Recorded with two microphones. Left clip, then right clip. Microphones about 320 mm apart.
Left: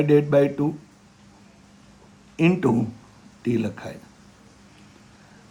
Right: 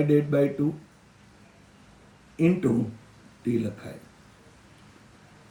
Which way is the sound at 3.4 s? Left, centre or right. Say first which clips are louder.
Left 3 dB; centre.